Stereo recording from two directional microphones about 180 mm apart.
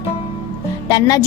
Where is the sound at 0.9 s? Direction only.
20° left (ahead or behind).